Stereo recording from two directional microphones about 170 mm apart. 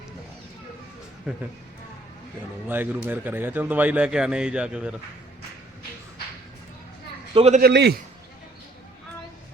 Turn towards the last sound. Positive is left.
turn(degrees=-70)  # may be behind; listen again after turning